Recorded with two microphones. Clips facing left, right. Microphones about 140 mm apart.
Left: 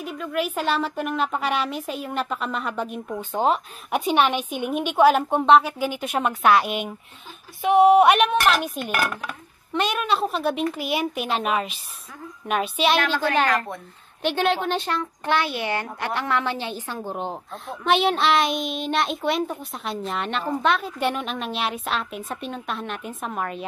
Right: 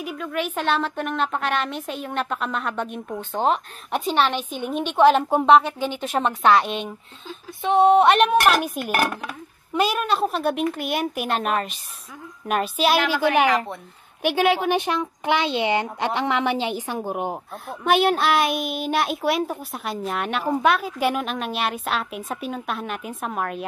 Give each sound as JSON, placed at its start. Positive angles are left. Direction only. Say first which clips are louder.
{"t": 0.0, "sound": "a child's voice", "louder": "left 1 dB", "side_deg": 0}
{"t": 17.6, "sound": "a child's voice", "louder": "right 2 dB", "side_deg": 0}